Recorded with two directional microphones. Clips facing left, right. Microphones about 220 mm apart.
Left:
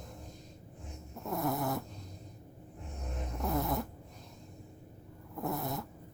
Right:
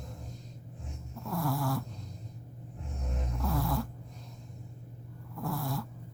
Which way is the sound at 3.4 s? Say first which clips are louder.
Even; 20° left (ahead or behind).